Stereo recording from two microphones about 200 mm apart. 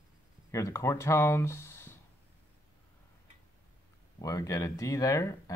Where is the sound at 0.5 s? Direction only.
15° left (ahead or behind).